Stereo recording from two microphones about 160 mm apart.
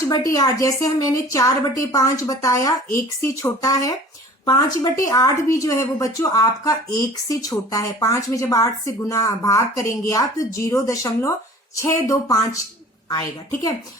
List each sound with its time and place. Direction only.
0.0 s a woman's voice: 20° left (ahead or behind)